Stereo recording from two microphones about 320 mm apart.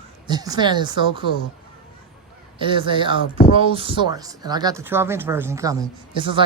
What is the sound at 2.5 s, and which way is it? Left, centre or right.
Speech, centre.